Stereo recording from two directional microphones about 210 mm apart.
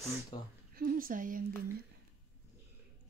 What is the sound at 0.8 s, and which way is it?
Speech, 40° right (ahead or behind).